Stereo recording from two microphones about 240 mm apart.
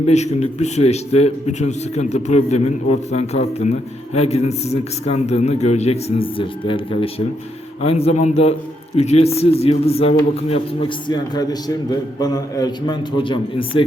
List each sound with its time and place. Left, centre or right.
0.1 s a man's voice: left